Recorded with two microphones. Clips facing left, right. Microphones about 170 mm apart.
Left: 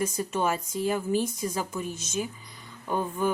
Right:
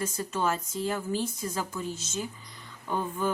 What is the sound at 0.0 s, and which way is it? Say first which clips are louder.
A woman's voice: left 2 dB; 15° left (ahead or behind).